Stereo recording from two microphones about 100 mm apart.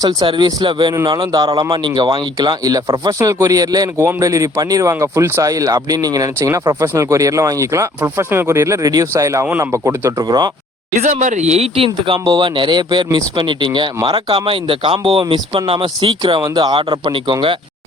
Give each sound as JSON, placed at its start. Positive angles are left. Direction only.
{"t": 0.0, "sound": "speech", "side_deg": -45}
{"t": 3.2, "sound": "speech", "side_deg": -35}
{"t": 10.2, "sound": "speech", "side_deg": -45}
{"t": 11.5, "sound": "speech", "side_deg": -80}
{"t": 16.4, "sound": "speech", "side_deg": -45}